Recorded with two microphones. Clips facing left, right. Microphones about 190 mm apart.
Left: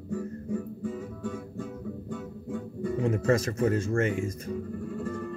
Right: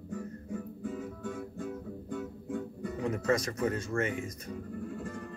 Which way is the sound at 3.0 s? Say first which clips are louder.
Left 4 dB; 25° left (ahead or behind).